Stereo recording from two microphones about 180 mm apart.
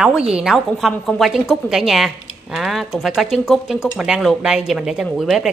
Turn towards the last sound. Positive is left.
turn(degrees=0)  # may be behind; listen again after turning